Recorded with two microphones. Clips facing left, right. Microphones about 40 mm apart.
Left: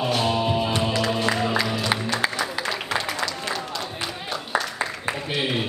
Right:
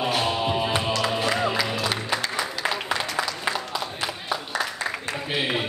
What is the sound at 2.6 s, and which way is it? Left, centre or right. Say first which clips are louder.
Applause: right 3 dB; centre.